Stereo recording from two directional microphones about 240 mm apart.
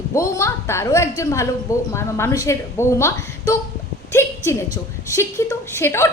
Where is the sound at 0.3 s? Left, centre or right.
Centre.